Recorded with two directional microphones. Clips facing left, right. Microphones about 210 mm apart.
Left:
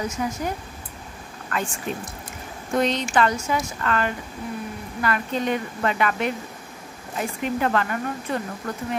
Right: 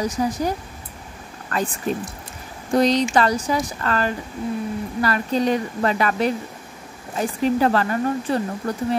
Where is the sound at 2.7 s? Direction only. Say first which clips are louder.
Right 4 dB; 35° right (ahead or behind).